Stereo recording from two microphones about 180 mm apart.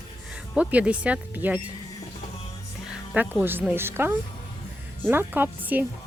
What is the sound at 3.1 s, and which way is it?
Speech, 10° right (ahead or behind).